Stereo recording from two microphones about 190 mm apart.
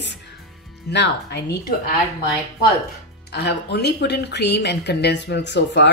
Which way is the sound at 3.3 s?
60° left (ahead or behind).